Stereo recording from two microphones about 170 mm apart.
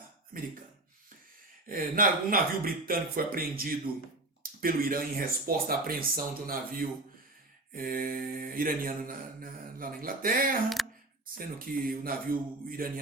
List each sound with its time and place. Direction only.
1.6 s mantra: 55° right (ahead or behind)
10.8 s a sound: centre (ahead or behind)
11.3 s mantra: 55° right (ahead or behind)